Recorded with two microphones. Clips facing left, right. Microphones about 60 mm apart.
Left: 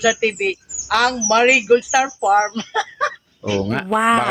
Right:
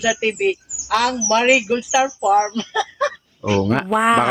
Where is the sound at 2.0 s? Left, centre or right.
Left.